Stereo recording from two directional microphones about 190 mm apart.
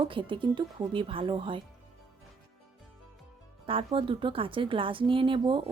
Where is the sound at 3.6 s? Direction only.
30° right (ahead or behind).